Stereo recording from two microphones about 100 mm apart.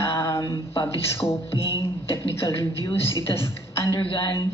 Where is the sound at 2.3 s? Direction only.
25° left (ahead or behind).